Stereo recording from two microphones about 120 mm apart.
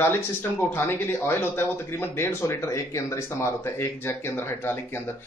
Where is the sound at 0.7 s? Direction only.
20° left (ahead or behind).